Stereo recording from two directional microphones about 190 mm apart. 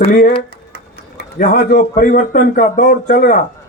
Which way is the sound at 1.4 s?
50° left (ahead or behind).